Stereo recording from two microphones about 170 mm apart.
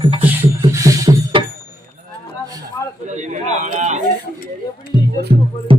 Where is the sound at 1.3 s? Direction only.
30° right (ahead or behind).